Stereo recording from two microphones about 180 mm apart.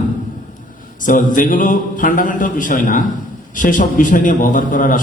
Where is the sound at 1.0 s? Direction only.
45° left (ahead or behind).